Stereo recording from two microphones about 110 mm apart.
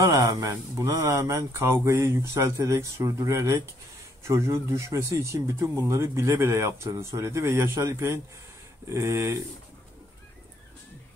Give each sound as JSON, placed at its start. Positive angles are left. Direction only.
{"t": 0.1, "sound": "speech", "side_deg": -30}